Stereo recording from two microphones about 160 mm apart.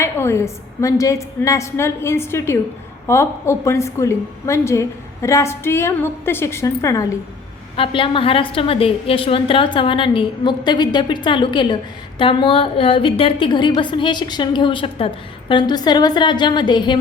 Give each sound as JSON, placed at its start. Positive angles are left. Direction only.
{"t": 0.0, "sound": "a woman's voice", "side_deg": 15}
{"t": 7.8, "sound": "a woman's voice", "side_deg": 35}